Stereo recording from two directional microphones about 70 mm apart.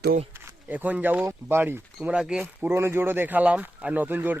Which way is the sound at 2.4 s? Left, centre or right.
Right.